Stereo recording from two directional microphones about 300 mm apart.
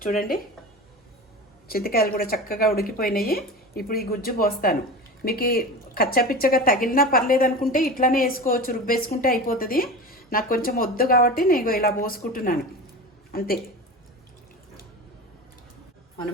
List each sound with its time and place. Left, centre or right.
0.0 s a woman's voice: left
1.6 s a woman's voice: left